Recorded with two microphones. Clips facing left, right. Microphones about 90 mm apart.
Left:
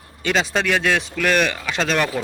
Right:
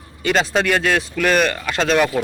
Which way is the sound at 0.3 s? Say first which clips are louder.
Right 2 dB; centre (ahead or behind).